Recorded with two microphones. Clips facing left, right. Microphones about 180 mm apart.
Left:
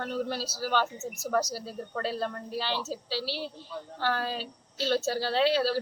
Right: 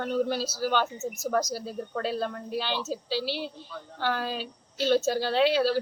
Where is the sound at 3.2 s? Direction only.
35° left (ahead or behind).